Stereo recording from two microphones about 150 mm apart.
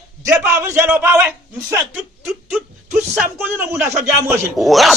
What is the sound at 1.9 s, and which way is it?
Speech, 5° right (ahead or behind).